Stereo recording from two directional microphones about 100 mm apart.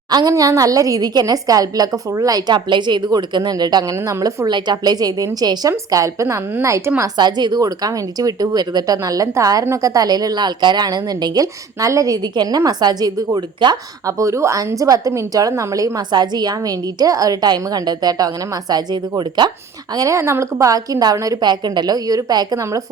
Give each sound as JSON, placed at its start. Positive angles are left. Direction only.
{"t": 0.1, "sound": "a woman's voice", "side_deg": -40}
{"t": 4.1, "sound": "a woman's voice", "side_deg": -30}
{"t": 4.4, "sound": "a woman's voice", "side_deg": -45}
{"t": 7.2, "sound": "a woman's voice", "side_deg": -45}
{"t": 14.2, "sound": "a woman's voice", "side_deg": -30}
{"t": 20.0, "sound": "a woman's voice", "side_deg": -30}